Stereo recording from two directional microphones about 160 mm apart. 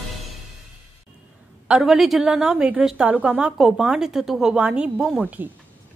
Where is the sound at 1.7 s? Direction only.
Centre (ahead or behind).